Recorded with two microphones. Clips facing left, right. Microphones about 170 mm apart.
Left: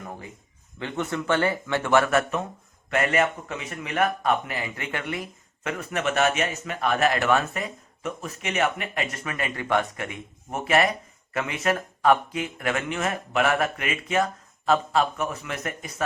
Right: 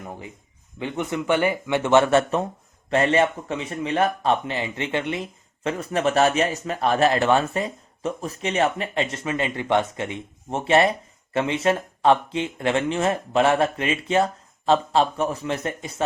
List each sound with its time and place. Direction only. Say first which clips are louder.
0.8 s speech: right 2 dB; 15° right (ahead or behind)